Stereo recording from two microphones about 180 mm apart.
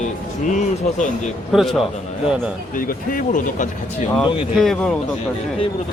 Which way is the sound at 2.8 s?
50° left (ahead or behind).